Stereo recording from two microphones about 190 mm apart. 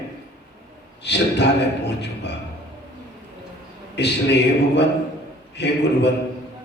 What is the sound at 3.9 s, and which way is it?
Speech, 65° left (ahead or behind).